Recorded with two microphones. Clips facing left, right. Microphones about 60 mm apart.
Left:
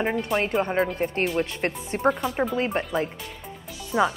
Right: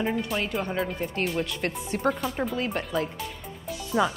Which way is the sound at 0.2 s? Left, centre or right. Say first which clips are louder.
Left 5 dB; left.